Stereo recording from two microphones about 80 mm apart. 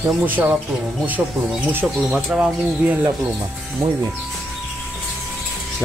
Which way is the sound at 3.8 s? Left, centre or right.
Right.